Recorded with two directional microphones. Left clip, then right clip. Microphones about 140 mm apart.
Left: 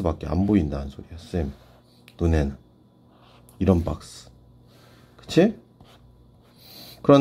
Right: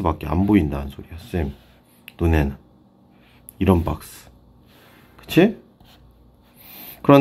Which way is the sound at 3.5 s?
20° left (ahead or behind).